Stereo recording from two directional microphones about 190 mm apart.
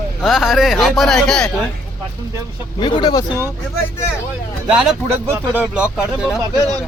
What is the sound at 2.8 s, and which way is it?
Speech, 25° left (ahead or behind).